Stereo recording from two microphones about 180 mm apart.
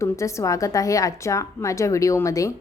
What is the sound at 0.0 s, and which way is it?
A woman's voice, 15° left (ahead or behind).